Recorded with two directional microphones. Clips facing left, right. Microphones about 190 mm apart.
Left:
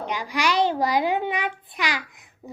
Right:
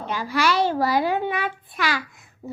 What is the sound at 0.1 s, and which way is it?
A child's voice, 15° left (ahead or behind).